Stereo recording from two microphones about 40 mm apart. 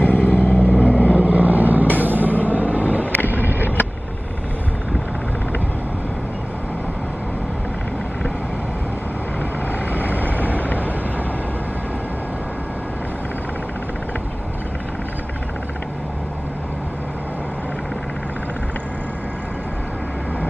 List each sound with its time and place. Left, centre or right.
0.0 s vehicle: left
1.1 s vehicle: right
3.3 s a sound: right
10.0 s vehicle: right